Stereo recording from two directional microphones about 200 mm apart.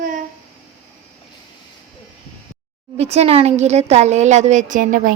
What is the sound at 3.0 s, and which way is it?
A woman's voice, 30° right (ahead or behind).